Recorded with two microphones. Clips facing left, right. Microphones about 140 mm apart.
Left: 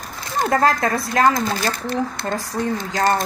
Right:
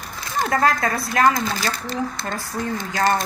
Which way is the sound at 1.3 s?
50° left (ahead or behind).